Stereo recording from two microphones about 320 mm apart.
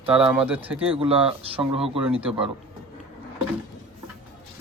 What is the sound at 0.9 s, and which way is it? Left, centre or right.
Speech, centre.